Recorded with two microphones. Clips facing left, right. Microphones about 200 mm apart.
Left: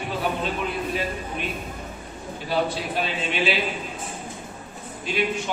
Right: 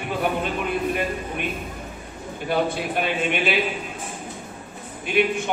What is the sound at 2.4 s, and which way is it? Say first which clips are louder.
A man's voice: right 2 dB; 55° right (ahead or behind).